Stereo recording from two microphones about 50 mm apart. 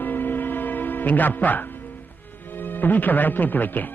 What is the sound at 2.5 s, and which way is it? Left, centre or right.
Speech, left.